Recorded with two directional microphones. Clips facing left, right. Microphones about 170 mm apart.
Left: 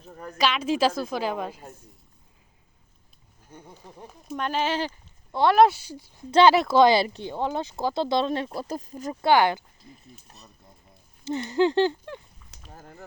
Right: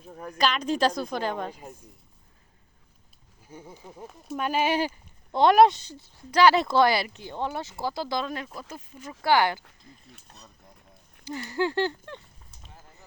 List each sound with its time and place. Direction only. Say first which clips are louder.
0.1 s speech: left 1 dB; 5° right (ahead or behind)
3.5 s speech: right 2 dB; 5° right (ahead or behind)
5.6 s speech: even; 10° left (ahead or behind)
6.7 s speech: left 4 dB; 20° left (ahead or behind)
7.3 s speech: left 3 dB; 15° left (ahead or behind)
8.4 s speech: left 8 dB; 40° left (ahead or behind)
9.2 s speech: left 3 dB; 20° left (ahead or behind)
10.2 s speech: even; 5° left (ahead or behind)
11.3 s speech: left 6 dB; 20° left (ahead or behind)
12.4 s a sound: left 1 dB; 40° right (ahead or behind)
12.7 s a sound: left 9 dB; 55° left (ahead or behind)